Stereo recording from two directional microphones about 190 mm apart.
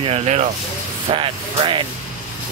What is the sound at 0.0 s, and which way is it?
Speech, 30° right (ahead or behind).